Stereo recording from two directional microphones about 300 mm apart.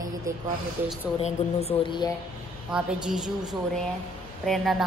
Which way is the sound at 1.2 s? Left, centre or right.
Centre.